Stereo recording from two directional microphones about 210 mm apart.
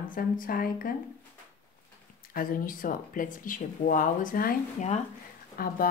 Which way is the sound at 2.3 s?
45° left (ahead or behind).